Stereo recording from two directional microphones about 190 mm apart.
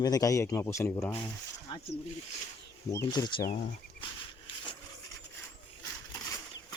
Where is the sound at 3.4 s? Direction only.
40° left (ahead or behind).